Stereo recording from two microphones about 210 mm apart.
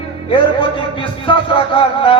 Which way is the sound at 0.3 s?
25° left (ahead or behind).